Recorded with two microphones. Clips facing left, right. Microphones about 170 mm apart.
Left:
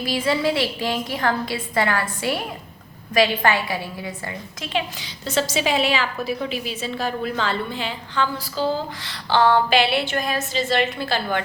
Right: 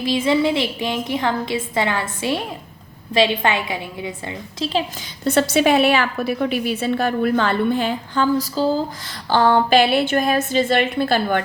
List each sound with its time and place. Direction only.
0.0 s a woman's voice: 20° right (ahead or behind)
5.2 s a woman's voice: 55° right (ahead or behind)